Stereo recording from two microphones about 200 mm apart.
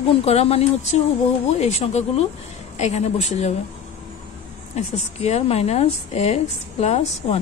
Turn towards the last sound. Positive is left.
turn(degrees=35)  # may be behind; listen again after turning